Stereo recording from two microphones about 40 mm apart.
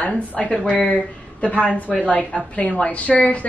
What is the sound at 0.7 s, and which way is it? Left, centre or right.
A woman's voice, left.